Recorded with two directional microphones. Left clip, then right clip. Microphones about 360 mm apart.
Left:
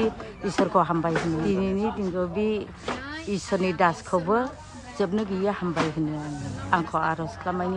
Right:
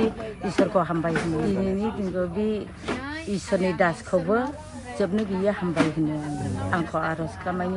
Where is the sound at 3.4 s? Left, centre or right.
Centre.